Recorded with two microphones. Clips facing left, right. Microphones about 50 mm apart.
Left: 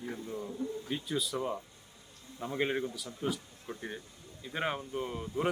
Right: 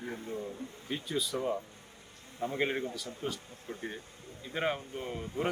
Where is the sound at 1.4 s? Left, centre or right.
Right.